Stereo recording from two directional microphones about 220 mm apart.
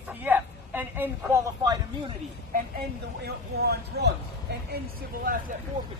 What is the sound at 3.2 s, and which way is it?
Speech, 45° right (ahead or behind).